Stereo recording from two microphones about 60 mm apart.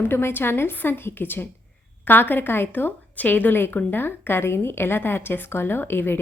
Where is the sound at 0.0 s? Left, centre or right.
Left.